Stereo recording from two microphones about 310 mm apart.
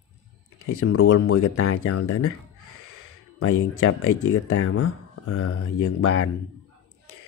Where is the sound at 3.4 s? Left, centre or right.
Left.